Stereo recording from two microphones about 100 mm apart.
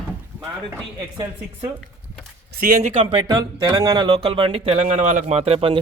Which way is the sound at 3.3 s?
40° right (ahead or behind).